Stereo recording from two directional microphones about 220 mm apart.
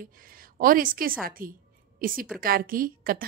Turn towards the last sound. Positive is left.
turn(degrees=-40)  # may be behind; listen again after turning